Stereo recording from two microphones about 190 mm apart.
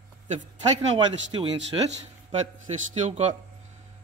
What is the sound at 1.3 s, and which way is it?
Speech, 25° right (ahead or behind).